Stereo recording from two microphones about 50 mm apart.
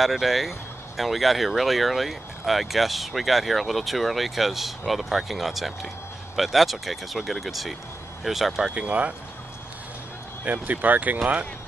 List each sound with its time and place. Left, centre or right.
0.0 s speech: centre
8.7 s speech: right
10.4 s speech: right